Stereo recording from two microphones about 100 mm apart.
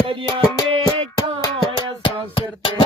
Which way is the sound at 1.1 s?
40° left (ahead or behind).